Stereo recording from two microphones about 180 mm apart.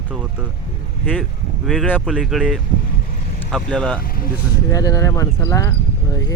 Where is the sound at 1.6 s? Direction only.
Centre (ahead or behind).